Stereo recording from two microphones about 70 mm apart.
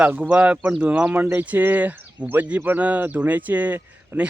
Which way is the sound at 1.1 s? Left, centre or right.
Right.